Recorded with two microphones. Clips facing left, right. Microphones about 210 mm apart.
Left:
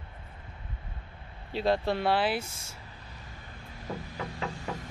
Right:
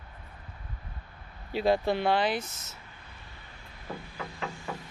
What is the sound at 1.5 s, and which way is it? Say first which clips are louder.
Speech: right 2 dB; centre (ahead or behind).